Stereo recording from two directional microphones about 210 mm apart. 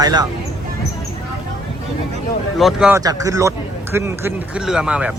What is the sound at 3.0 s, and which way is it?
A man's voice, 15° right (ahead or behind).